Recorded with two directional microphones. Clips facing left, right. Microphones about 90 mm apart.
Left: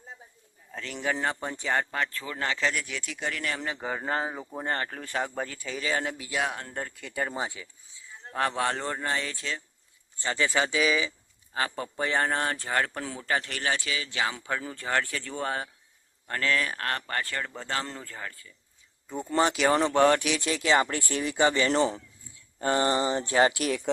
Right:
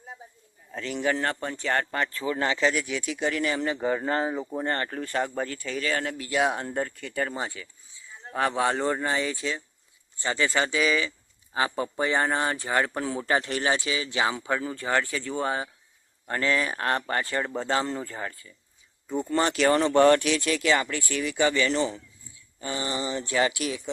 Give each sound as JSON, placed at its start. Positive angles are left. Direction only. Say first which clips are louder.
{"t": 0.7, "sound": "speech", "louder": "right 4 dB", "side_deg": -5}
{"t": 2.1, "sound": "speech", "louder": "right 5 dB", "side_deg": -10}
{"t": 6.5, "sound": "speech", "louder": "right 7 dB", "side_deg": -25}
{"t": 6.7, "sound": "speech", "louder": "right 4 dB", "side_deg": 5}
{"t": 8.2, "sound": "speech", "louder": "right 3 dB", "side_deg": -5}
{"t": 11.5, "sound": "speech", "louder": "right 4 dB", "side_deg": -10}
{"t": 16.2, "sound": "speech", "louder": "right 2 dB", "side_deg": -20}
{"t": 19.0, "sound": "speech", "louder": "even", "side_deg": 0}
{"t": 20.4, "sound": "speech", "louder": "even", "side_deg": 20}
{"t": 20.8, "sound": "speech", "louder": "right 1 dB", "side_deg": 35}
{"t": 21.9, "sound": "speech", "louder": "left 1 dB", "side_deg": 50}